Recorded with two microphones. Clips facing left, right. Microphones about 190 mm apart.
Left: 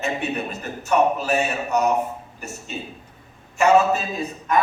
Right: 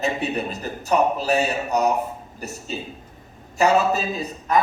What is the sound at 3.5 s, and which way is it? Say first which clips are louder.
Speech: left 2 dB; 35° right (ahead or behind).